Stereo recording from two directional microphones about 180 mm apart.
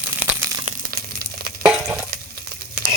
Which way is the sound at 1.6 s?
5° right (ahead or behind).